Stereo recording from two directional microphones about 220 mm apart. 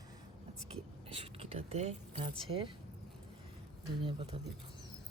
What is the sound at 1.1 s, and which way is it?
Speech, 25° right (ahead or behind).